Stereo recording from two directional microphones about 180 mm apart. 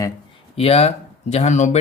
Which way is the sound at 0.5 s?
35° left (ahead or behind).